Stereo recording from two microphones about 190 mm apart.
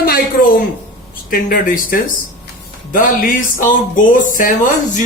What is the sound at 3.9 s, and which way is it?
Speech, 45° left (ahead or behind).